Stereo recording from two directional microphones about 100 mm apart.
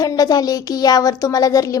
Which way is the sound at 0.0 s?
40° left (ahead or behind).